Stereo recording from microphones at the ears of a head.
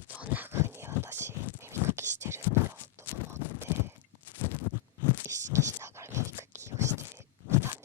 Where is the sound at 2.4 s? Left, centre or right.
Left.